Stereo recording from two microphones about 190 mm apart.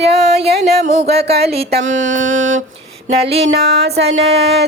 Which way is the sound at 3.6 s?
60° right (ahead or behind).